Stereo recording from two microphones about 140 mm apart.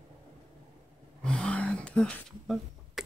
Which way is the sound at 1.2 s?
5° left (ahead or behind).